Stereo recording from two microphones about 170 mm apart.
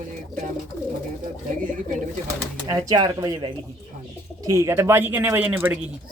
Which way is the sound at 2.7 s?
20° right (ahead or behind).